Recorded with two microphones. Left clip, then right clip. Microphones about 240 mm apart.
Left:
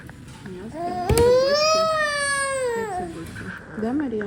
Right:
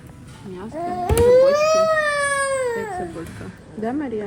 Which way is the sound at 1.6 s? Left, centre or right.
Left.